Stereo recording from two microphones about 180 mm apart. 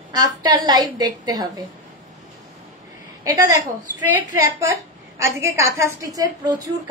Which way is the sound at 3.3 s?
20° right (ahead or behind).